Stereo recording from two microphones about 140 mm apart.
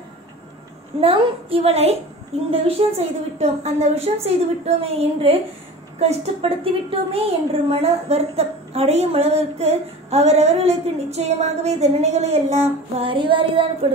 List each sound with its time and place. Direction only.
1.0 s a woman's voice: 40° right (ahead or behind)
2.8 s a woman's voice: 40° right (ahead or behind)